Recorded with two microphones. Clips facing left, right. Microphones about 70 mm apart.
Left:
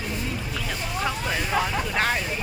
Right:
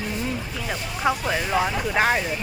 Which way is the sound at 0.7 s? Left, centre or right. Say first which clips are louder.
Right 5 dB; centre.